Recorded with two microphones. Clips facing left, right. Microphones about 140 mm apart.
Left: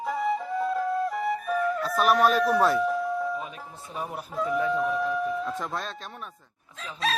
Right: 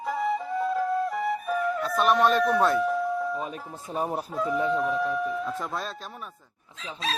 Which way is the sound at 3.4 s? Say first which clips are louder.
Right 4 dB; 40° right (ahead or behind).